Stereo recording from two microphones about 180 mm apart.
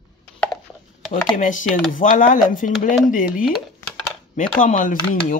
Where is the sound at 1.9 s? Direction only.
45° left (ahead or behind).